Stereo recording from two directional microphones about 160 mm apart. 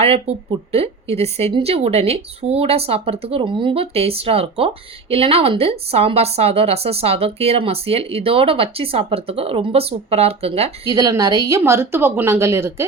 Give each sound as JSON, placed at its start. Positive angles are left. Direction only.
{"t": 0.0, "sound": "speech", "side_deg": -40}
{"t": 10.9, "sound": "a woman's voice", "side_deg": -25}